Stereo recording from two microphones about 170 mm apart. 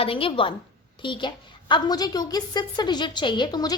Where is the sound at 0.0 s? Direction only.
30° left (ahead or behind).